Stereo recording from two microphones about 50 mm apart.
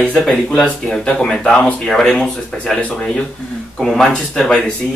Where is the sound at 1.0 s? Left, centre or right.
Centre.